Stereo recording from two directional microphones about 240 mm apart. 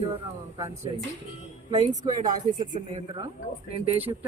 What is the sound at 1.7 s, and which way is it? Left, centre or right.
Speech, centre.